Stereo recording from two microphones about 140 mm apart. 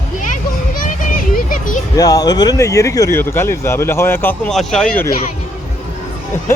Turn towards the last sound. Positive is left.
turn(degrees=5)  # may be behind; listen again after turning